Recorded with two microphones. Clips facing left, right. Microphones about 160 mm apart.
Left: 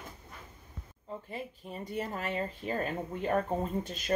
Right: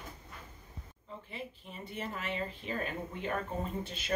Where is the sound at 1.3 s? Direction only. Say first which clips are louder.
Left 2 dB; 40° left (ahead or behind).